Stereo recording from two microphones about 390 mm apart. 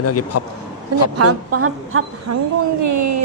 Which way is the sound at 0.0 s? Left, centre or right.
Left.